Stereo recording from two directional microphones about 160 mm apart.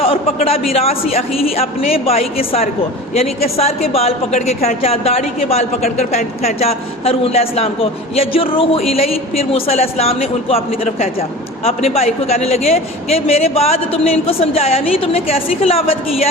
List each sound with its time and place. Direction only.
0.0 s a woman's voice: 35° left (ahead or behind)